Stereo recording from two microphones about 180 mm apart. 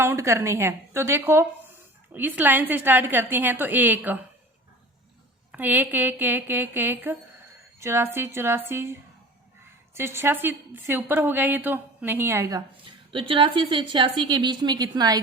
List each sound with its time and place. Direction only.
0.0 s a woman's voice: 15° right (ahead or behind)
5.5 s a woman's voice: 10° right (ahead or behind)